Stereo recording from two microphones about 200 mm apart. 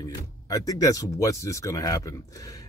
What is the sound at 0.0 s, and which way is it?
Speech, 15° left (ahead or behind).